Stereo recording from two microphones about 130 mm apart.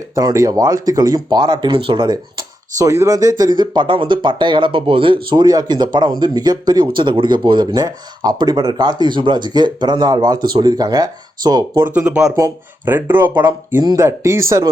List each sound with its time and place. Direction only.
0.1 s speech: 30° right (ahead or behind)
2.7 s speech: 25° right (ahead or behind)
11.9 s speech: 10° right (ahead or behind)